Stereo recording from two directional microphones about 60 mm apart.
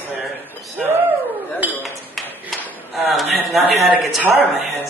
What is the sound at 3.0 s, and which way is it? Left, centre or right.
Speech, centre.